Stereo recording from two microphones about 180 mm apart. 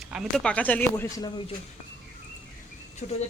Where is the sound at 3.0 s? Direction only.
40° left (ahead or behind).